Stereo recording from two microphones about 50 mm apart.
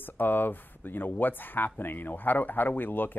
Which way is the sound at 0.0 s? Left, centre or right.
Left.